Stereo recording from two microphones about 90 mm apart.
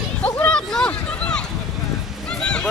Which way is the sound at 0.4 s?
10° left (ahead or behind).